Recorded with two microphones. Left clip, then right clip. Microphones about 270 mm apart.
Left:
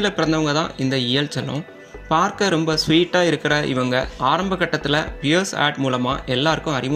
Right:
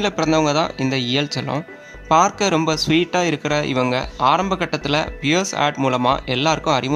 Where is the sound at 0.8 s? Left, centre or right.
Right.